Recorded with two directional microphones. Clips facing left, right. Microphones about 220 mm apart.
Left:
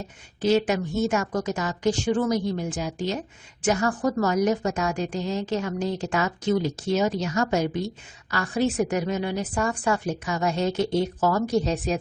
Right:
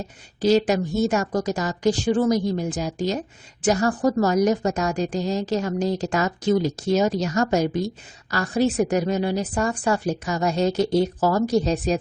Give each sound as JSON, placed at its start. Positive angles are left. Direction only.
{"t": 0.4, "sound": "a woman's voice", "side_deg": -35}